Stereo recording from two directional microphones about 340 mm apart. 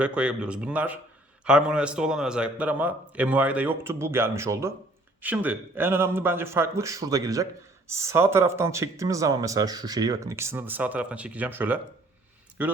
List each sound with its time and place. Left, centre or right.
0.0 s a man's voice: centre